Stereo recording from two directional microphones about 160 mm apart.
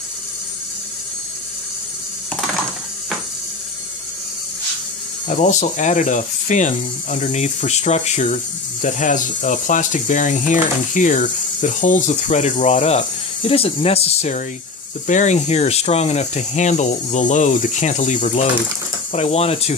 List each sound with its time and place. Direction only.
5.3 s speech: 50° left (ahead or behind)